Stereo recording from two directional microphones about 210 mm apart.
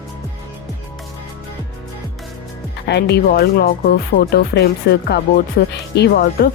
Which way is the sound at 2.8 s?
50° left (ahead or behind).